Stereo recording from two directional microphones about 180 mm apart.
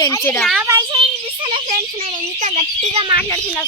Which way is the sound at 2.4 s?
40° right (ahead or behind).